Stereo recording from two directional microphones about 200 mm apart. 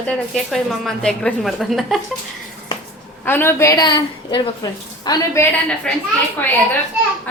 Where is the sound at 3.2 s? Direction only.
10° left (ahead or behind).